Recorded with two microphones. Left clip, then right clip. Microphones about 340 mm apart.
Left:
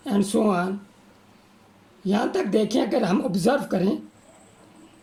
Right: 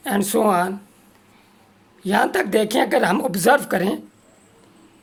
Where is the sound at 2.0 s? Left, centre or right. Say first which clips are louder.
Right 6 dB; right.